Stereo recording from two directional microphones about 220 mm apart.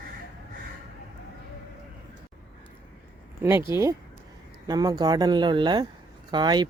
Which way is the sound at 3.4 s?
10° right (ahead or behind).